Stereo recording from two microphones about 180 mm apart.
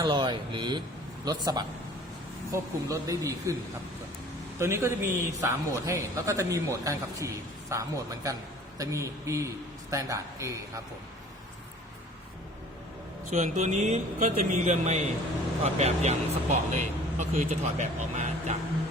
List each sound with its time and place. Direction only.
0.0 s a man's voice: 25° right (ahead or behind)
4.6 s a man's voice: 15° right (ahead or behind)
13.3 s speech: 40° right (ahead or behind)